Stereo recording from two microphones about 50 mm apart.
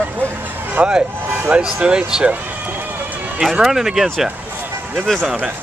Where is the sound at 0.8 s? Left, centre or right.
Right.